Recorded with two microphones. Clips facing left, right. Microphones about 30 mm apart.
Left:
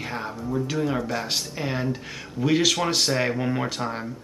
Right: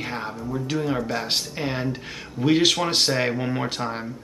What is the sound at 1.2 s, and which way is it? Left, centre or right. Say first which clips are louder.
Speech: right 2 dB; centre.